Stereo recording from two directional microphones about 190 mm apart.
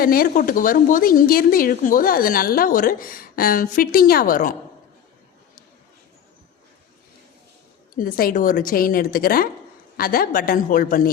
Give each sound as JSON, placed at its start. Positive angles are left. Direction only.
{"t": 0.0, "sound": "a woman's voice", "side_deg": 50}
{"t": 7.9, "sound": "a woman's voice", "side_deg": 50}